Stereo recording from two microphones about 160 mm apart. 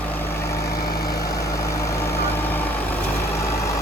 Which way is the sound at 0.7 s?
75° left (ahead or behind).